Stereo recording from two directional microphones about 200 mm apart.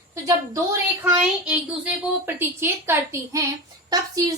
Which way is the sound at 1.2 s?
5° right (ahead or behind).